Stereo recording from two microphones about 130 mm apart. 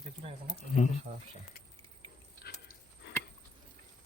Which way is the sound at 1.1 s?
90° right.